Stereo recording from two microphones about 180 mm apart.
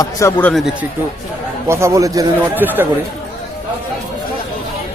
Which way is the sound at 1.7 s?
15° right (ahead or behind).